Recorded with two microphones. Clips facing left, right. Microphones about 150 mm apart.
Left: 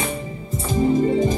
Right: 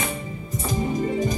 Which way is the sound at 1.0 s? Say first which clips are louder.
Left 5 dB; 30° left (ahead or behind).